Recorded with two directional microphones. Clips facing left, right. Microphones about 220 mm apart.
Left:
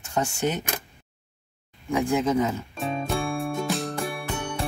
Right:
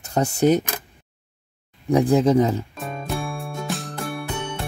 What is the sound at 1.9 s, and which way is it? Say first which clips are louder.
Speech: right 6 dB; 35° right (ahead or behind).